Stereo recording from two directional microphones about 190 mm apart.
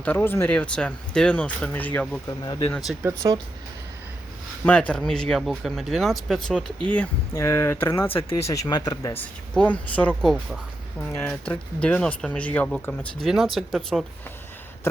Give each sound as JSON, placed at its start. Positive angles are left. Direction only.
{"t": 0.0, "sound": "speech", "side_deg": 10}
{"t": 2.2, "sound": "speech", "side_deg": 20}
{"t": 3.0, "sound": "speech", "side_deg": -15}
{"t": 4.6, "sound": "speech", "side_deg": 5}
{"t": 6.9, "sound": "speech", "side_deg": 10}
{"t": 9.6, "sound": "speech", "side_deg": 5}